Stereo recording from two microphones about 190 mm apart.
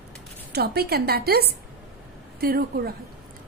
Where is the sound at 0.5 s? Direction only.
55° right (ahead or behind).